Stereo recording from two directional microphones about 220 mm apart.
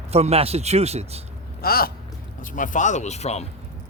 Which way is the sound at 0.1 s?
30° right (ahead or behind).